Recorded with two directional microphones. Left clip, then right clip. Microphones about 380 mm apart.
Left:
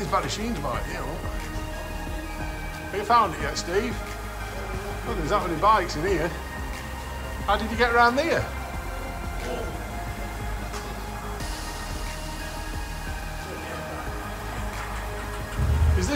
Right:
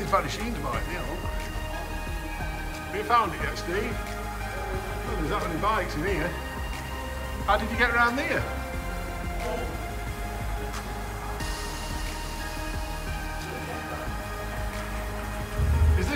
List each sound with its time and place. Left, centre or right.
0.1 s speech: centre
3.1 s speech: centre
5.3 s speech: centre
7.4 s speech: centre